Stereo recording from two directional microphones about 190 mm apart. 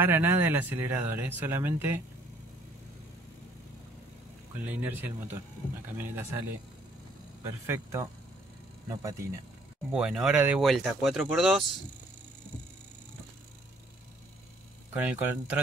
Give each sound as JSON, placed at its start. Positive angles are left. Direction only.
{"t": 0.0, "sound": "speech", "side_deg": -10}
{"t": 4.6, "sound": "speech", "side_deg": -10}
{"t": 7.4, "sound": "a man's voice", "side_deg": -15}
{"t": 9.9, "sound": "speech", "side_deg": -5}
{"t": 15.0, "sound": "speech", "side_deg": -5}